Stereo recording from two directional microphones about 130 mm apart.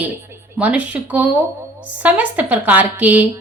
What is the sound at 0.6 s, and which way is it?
A woman's voice, 10° right (ahead or behind).